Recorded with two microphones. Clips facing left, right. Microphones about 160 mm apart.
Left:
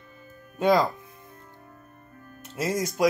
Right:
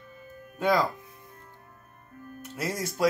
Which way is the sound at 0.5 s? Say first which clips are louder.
Left 4 dB; 20° left (ahead or behind).